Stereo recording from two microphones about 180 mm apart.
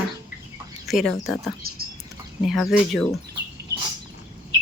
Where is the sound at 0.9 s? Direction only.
Centre (ahead or behind).